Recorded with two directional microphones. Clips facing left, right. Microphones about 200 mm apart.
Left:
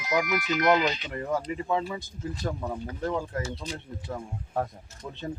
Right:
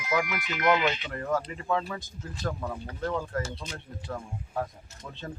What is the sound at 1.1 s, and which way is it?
Speech, 15° left (ahead or behind).